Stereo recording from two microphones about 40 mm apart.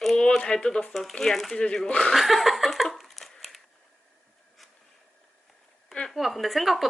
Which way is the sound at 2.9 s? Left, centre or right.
Centre.